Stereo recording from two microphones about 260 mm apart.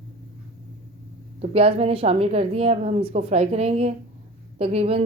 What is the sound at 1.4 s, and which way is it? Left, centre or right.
Speech, right.